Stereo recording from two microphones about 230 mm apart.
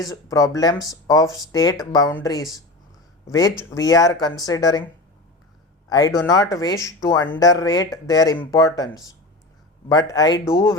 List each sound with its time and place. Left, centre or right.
0.1 s speech: centre
3.8 s speech: centre
5.9 s speech: centre